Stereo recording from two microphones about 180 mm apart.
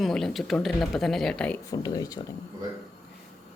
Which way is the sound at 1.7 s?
20° left (ahead or behind).